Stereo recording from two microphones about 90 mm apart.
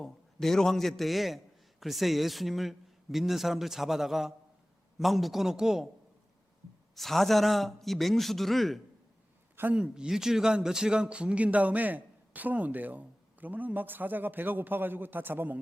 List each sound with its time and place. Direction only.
0.0 s a man's voice: 5° left (ahead or behind)
6.9 s speech: centre (ahead or behind)
9.6 s speech: 20° right (ahead or behind)
9.8 s a man's voice: 5° right (ahead or behind); by 15.5 s 20° right (ahead or behind)